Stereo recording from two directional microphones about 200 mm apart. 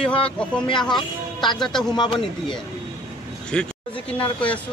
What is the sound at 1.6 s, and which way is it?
Speech, centre (ahead or behind).